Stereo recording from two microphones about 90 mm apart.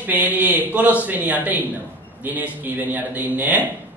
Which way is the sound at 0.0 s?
20° right (ahead or behind).